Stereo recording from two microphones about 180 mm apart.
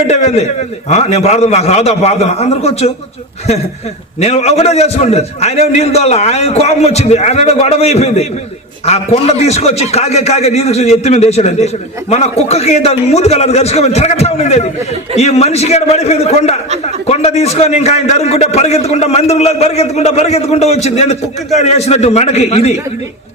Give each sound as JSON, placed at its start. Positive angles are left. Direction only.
{"t": 0.1, "sound": "a man's voice", "side_deg": 35}
{"t": 4.2, "sound": "a man's voice", "side_deg": 35}